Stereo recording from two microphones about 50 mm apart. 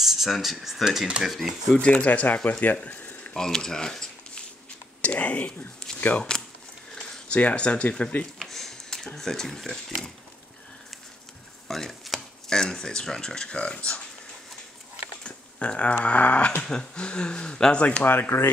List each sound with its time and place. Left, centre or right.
0.0 s speech: centre
1.7 s speech: centre
2.0 s speech: left
2.6 s a sound: left
3.3 s speech: centre
5.0 s speech: left
7.3 s speech: left
8.4 s speech: centre
11.6 s a sound: centre
12.4 s speech: centre
15.2 s speech: left
18.0 s speech: left